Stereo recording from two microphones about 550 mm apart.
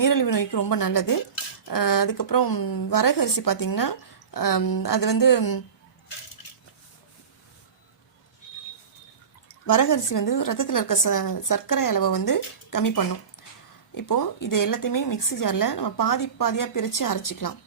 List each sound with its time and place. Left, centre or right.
0.0 s speech: left
9.6 s speech: left